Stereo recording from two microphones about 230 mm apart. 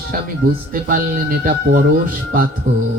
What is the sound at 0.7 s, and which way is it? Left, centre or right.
Speech, right.